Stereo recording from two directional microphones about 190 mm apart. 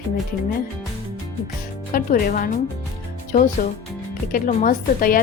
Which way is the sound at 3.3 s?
40° left (ahead or behind).